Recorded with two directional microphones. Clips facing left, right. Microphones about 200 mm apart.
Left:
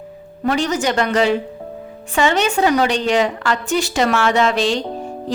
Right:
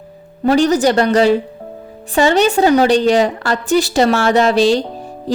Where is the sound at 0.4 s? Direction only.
35° right (ahead or behind).